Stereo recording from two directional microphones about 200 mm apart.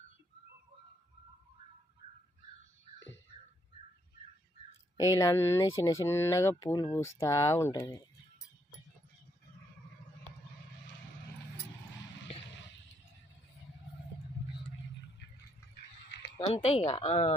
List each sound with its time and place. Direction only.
5.2 s speech: 15° left (ahead or behind)
16.4 s speech: 30° left (ahead or behind)